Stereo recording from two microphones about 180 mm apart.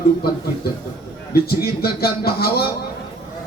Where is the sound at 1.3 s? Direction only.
60° left (ahead or behind).